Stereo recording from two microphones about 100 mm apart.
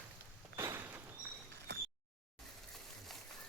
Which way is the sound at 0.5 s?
25° right (ahead or behind).